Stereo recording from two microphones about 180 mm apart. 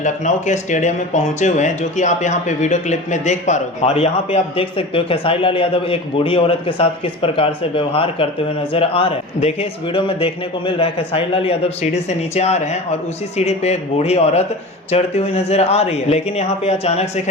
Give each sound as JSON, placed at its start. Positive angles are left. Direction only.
{"t": 0.0, "sound": "speech", "side_deg": 40}